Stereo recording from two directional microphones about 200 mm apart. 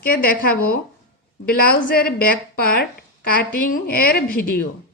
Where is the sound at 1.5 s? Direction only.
50° left (ahead or behind).